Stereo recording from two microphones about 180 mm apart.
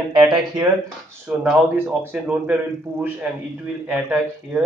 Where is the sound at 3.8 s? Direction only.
10° right (ahead or behind).